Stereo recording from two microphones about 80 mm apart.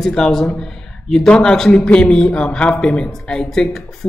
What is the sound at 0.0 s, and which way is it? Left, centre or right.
A man's voice, centre.